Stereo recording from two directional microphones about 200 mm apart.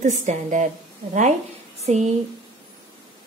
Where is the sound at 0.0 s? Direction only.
35° right (ahead or behind).